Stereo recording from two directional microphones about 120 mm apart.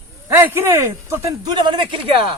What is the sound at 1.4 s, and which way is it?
Speech, 35° right (ahead or behind).